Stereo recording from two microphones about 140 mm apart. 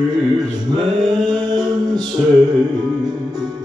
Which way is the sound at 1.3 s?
30° right (ahead or behind).